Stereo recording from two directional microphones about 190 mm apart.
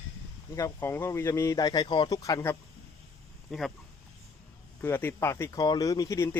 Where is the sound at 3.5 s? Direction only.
Centre (ahead or behind).